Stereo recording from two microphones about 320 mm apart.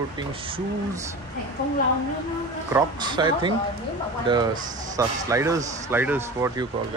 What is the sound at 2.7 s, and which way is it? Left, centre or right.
Speech, centre.